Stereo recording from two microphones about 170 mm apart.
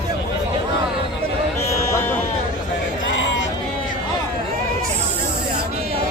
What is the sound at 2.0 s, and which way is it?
Music, 15° left (ahead or behind).